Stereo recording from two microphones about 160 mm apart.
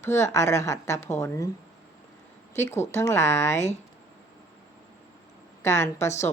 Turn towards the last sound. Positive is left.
turn(degrees=15)  # may be behind; listen again after turning